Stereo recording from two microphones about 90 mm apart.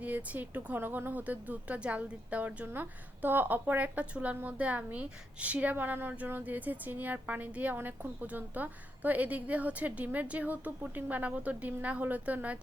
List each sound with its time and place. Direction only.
0.0 s speech: 15° right (ahead or behind)